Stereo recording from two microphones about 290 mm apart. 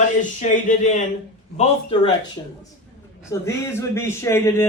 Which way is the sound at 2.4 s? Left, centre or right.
Centre.